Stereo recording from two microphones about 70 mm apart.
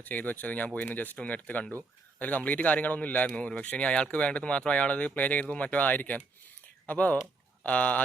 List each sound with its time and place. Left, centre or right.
0.0 s a man's voice: left